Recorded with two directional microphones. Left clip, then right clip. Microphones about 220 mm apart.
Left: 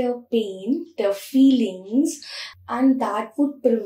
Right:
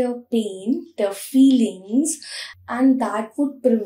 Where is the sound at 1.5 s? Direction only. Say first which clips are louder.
Right 1 dB; 25° right (ahead or behind).